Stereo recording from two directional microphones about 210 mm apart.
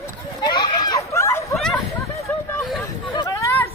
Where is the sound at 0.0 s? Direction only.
20° left (ahead or behind).